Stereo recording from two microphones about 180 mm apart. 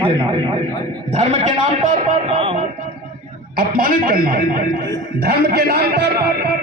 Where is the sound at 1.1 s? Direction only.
40° right (ahead or behind).